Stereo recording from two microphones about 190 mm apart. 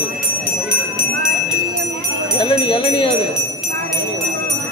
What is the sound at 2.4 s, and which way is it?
Jingle bell, 25° left (ahead or behind).